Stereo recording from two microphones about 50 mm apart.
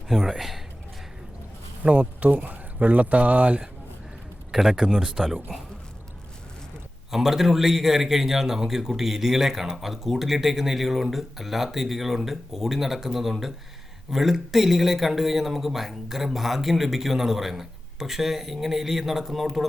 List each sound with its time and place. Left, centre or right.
0.1 s a man's voice: centre
1.8 s speech: right
4.5 s speech: centre
7.1 s a man's voice: centre